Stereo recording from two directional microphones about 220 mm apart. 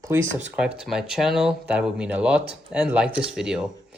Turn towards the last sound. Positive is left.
turn(degrees=-5)  # may be behind; listen again after turning